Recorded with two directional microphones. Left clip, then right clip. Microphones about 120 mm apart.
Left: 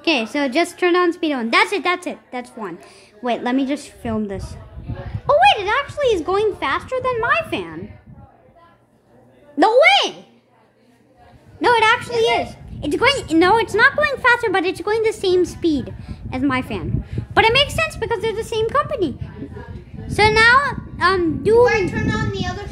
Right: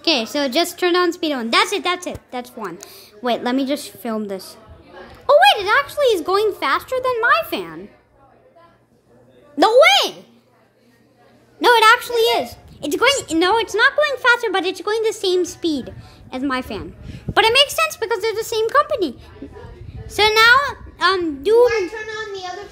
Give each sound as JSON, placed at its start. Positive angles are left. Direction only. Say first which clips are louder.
{"t": 0.0, "sound": "a woman's voice", "louder": "even", "side_deg": 15}
{"t": 2.9, "sound": "a woman's voice", "louder": "right 2 dB", "side_deg": 10}
{"t": 9.6, "sound": "a woman's voice", "louder": "right 1 dB", "side_deg": 15}
{"t": 11.6, "sound": "a woman's voice", "louder": "right 3 dB", "side_deg": 0}
{"t": 12.9, "sound": "a woman's voice", "louder": "left 1 dB", "side_deg": 25}
{"t": 20.1, "sound": "a woman's voice", "louder": "even", "side_deg": 25}